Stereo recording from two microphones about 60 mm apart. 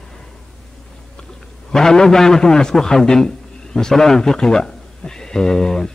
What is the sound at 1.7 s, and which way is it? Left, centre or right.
A man's voice, centre.